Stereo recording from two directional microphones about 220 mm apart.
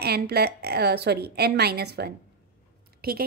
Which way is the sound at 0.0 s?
45° right (ahead or behind).